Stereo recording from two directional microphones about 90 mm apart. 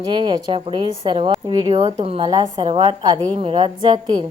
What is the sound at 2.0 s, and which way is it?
Speech, 90° right.